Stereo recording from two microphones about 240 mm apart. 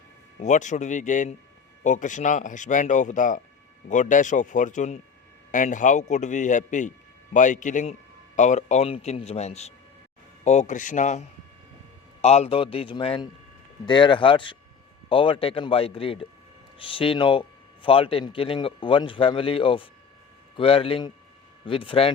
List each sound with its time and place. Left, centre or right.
0.3 s a man's voice: left